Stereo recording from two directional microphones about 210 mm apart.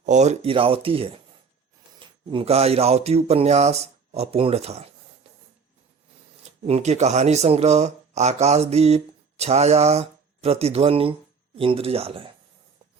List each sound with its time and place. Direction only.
0.0 s speech: 35° right (ahead or behind)
5.2 s spray: 30° right (ahead or behind)
6.7 s speech: 30° right (ahead or behind)